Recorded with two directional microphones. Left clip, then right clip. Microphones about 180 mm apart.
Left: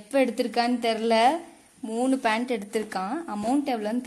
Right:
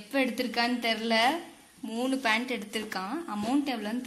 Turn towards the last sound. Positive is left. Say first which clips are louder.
# left 4 dB
turn(degrees=55)  # may be behind; listen again after turning